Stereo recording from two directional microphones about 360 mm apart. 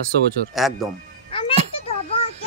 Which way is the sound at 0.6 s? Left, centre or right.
Centre.